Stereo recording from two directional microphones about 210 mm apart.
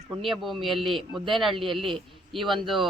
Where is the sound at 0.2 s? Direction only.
Centre (ahead or behind).